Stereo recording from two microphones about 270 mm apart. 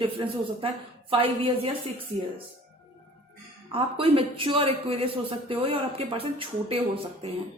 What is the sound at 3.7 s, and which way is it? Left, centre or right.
A woman's voice, right.